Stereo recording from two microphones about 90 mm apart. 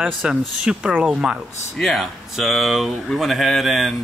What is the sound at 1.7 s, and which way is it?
Speech, centre (ahead or behind).